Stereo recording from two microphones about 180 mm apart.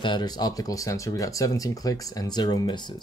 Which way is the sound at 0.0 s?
25° left (ahead or behind).